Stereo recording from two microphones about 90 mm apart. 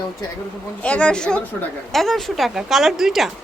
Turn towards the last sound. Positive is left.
turn(degrees=0)  # may be behind; listen again after turning